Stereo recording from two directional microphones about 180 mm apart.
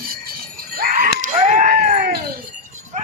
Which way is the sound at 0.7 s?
50° right (ahead or behind).